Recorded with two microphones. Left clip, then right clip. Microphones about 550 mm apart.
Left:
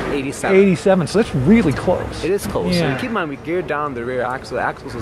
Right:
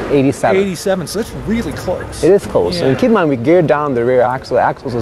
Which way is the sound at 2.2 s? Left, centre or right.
Right.